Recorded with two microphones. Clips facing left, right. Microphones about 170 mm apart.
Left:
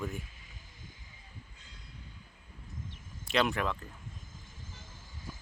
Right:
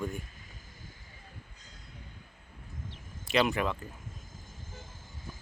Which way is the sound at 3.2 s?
Centre (ahead or behind).